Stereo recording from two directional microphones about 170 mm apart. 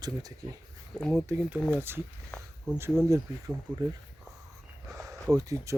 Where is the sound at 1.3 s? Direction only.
10° right (ahead or behind).